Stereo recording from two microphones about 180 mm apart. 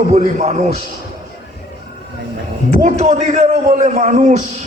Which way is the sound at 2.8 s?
40° right (ahead or behind).